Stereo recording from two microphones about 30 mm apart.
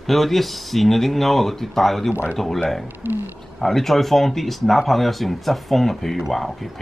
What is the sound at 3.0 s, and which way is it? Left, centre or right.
Speech, right.